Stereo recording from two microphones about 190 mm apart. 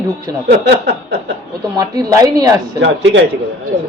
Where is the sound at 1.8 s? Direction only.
20° right (ahead or behind).